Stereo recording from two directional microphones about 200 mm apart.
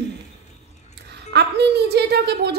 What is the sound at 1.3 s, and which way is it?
A woman's voice, 55° right (ahead or behind).